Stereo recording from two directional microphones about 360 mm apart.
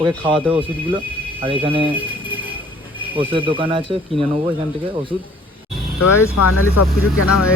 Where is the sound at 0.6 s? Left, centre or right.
Centre.